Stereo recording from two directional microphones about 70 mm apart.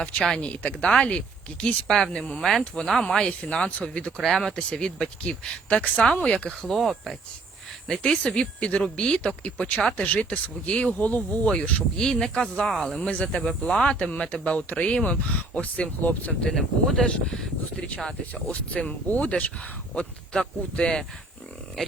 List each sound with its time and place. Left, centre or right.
0.0 s speech: centre
4.2 s speech: centre
6.7 s speech: centre
16.5 s speech: centre